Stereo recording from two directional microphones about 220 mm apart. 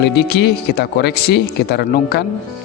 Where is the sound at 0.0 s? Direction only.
45° left (ahead or behind).